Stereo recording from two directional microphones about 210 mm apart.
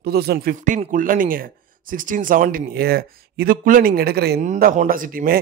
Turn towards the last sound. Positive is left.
turn(degrees=-40)  # may be behind; listen again after turning